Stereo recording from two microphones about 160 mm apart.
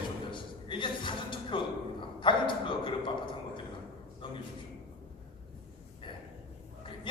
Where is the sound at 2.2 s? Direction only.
30° left (ahead or behind).